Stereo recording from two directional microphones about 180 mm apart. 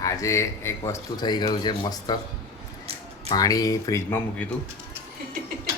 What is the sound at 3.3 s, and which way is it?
Speech, 20° left (ahead or behind).